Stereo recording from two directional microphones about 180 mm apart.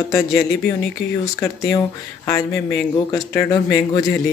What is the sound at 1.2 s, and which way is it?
Speech, 15° left (ahead or behind).